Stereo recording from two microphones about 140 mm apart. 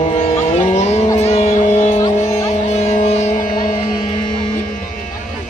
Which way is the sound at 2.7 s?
50° left (ahead or behind).